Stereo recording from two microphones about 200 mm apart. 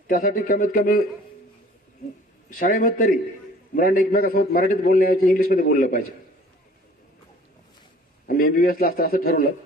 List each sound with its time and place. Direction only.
0.0 s a man's voice: 45° left (ahead or behind)
2.5 s a man's voice: 45° left (ahead or behind)
8.3 s a man's voice: 45° left (ahead or behind)